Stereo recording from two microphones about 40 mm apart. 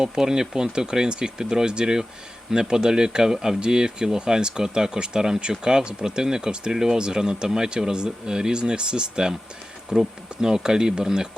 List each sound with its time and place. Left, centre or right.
0.0 s speech: centre